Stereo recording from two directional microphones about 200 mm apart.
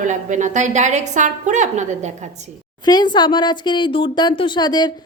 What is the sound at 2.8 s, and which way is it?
Speech, 20° left (ahead or behind).